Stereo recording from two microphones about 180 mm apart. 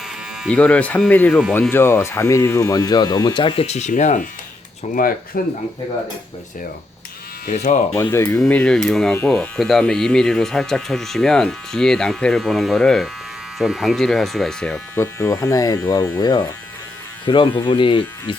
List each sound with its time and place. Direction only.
0.4 s speech: 5° left (ahead or behind); by 5.4 s 55° left (ahead or behind)
7.4 s speech: 45° left (ahead or behind)
8.1 s speech: 15° left (ahead or behind)
14.9 s speech: 15° left (ahead or behind)